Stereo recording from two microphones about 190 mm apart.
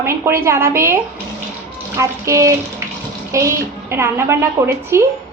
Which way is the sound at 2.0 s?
15° right (ahead or behind).